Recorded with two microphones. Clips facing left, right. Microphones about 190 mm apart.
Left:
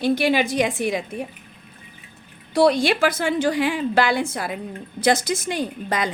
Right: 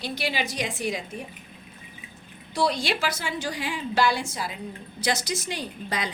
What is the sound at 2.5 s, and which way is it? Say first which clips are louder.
A woman's voice: left 8 dB; 60° left (ahead or behind).